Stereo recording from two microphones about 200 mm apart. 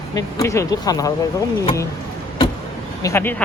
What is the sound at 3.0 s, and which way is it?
Speech, 10° left (ahead or behind).